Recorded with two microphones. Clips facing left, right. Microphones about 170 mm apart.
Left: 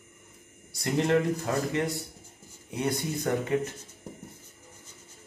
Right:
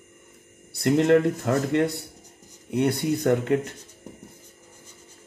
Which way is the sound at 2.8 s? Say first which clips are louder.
Right 7 dB; 60° right (ahead or behind).